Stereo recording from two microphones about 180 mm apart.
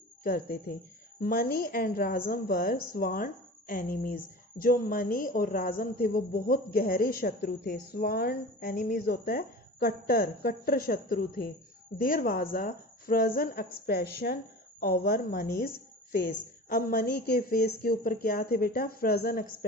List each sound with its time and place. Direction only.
0.2 s a woman's voice: 55° left (ahead or behind)